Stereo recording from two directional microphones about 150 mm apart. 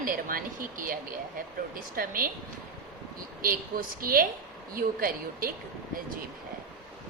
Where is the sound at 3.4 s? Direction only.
70° right (ahead or behind).